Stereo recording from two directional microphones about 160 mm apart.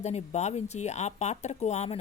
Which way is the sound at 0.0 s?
45° left (ahead or behind).